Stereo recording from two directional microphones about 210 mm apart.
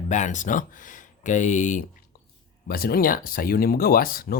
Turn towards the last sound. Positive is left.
turn(degrees=45)  # may be behind; listen again after turning